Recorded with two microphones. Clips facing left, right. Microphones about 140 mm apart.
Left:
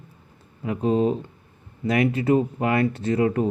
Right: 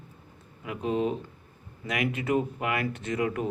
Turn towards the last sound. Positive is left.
turn(degrees=35)  # may be behind; listen again after turning